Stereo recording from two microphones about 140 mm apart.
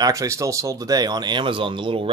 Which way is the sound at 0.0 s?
25° right (ahead or behind).